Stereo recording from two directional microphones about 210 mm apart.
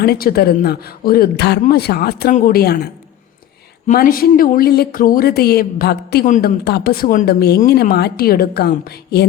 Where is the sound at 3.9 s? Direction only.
40° left (ahead or behind).